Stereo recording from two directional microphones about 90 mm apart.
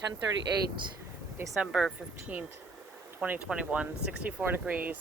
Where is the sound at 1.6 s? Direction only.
10° right (ahead or behind).